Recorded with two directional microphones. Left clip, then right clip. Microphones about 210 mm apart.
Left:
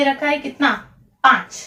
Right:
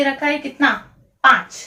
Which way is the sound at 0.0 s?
15° left (ahead or behind).